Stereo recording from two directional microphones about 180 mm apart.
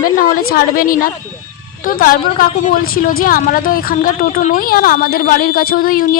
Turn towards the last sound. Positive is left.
turn(degrees=55)  # may be behind; listen again after turning